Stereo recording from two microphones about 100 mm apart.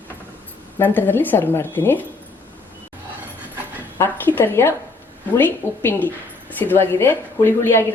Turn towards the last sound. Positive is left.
turn(degrees=25)  # may be behind; listen again after turning